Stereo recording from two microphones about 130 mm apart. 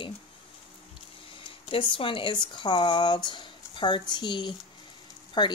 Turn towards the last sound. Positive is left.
turn(degrees=35)  # may be behind; listen again after turning